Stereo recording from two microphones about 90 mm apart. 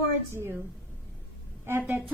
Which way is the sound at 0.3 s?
25° right (ahead or behind).